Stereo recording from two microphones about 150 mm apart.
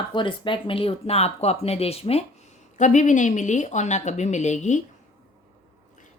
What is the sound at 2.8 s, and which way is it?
Speech, 55° left (ahead or behind).